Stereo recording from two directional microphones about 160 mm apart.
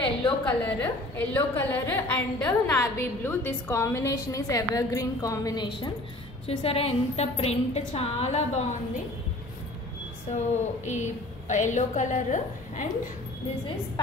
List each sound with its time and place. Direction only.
0.5 s a woman's voice: 10° left (ahead or behind); by 8.6 s 40° left (ahead or behind)
10.3 s a woman's voice: 45° left (ahead or behind)